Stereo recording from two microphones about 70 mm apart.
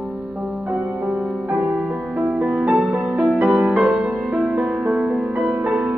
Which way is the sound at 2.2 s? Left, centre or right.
Centre.